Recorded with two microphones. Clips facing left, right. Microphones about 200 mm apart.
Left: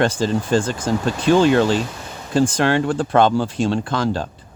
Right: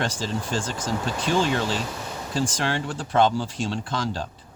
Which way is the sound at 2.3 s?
60° left (ahead or behind).